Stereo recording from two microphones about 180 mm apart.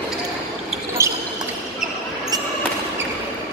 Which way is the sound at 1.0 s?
15° right (ahead or behind).